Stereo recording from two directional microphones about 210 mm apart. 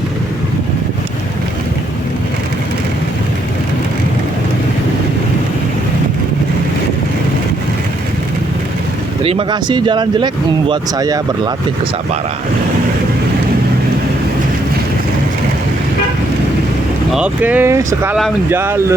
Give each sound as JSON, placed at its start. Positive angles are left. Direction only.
{"t": 9.2, "sound": "speech", "side_deg": -25}
{"t": 17.1, "sound": "speech", "side_deg": -5}